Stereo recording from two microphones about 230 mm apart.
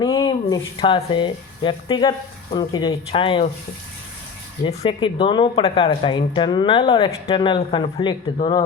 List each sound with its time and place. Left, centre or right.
0.0 s speech: left
4.6 s speech: left